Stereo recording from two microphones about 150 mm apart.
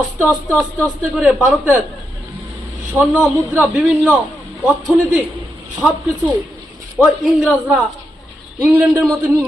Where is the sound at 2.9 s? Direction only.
15° right (ahead or behind).